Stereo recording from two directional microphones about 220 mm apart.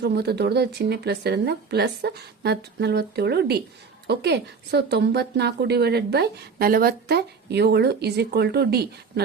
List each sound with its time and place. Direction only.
0.0 s speech: 50° right (ahead or behind)